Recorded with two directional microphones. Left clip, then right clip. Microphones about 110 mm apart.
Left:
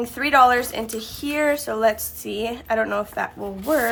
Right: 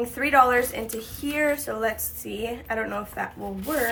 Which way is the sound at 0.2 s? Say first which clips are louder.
Left 3 dB; 35° left (ahead or behind).